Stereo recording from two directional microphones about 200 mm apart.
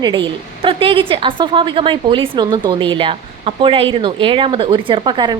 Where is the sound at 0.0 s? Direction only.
25° right (ahead or behind).